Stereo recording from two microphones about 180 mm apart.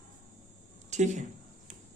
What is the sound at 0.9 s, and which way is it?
Speech, 40° right (ahead or behind).